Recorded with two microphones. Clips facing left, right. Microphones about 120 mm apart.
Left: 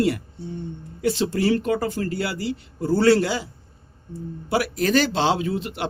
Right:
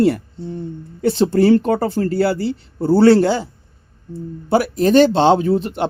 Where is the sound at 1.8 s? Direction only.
30° right (ahead or behind).